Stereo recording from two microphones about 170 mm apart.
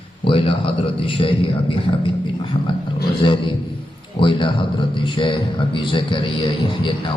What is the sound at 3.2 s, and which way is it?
A man's voice, 30° left (ahead or behind).